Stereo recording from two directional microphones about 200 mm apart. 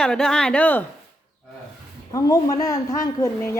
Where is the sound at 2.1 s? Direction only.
15° left (ahead or behind).